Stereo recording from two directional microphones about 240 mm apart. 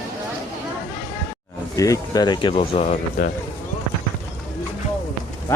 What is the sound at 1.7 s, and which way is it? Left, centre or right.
Speech, centre.